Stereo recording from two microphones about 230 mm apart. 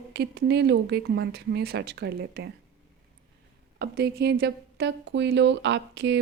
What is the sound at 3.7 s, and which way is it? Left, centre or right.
Speech, right.